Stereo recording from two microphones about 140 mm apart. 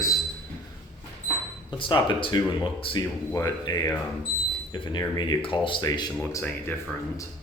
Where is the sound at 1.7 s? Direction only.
35° left (ahead or behind).